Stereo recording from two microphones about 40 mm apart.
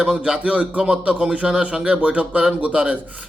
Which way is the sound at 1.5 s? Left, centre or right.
Right.